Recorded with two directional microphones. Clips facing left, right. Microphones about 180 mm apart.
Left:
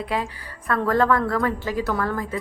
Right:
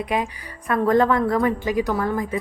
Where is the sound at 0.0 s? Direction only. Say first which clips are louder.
Right 2 dB; 15° right (ahead or behind).